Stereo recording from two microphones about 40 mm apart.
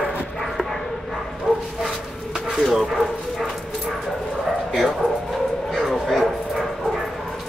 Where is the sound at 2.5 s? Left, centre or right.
Centre.